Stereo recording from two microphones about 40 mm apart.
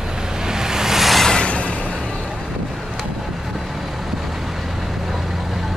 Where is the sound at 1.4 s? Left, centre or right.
Left.